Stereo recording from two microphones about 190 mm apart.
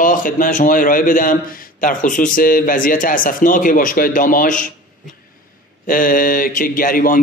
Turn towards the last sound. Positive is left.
turn(degrees=45)  # may be behind; listen again after turning